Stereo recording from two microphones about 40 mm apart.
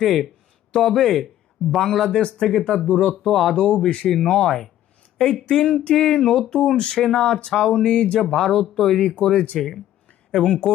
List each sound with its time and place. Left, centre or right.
0.0 s speech: centre; by 3.2 s left
3.2 s speech: centre
3.5 s speech: left
4.4 s speech: centre
8.2 s speech: centre
9.6 s speech: centre